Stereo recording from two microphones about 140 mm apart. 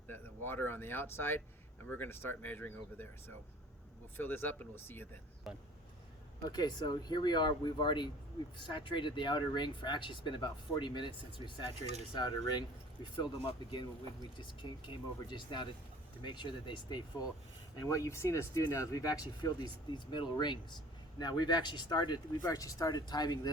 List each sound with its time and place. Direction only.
0.1 s speech: 15° left (ahead or behind)
5.5 s speech: centre (ahead or behind)
6.4 s speech: 30° left (ahead or behind)
17.7 s speech: 25° left (ahead or behind)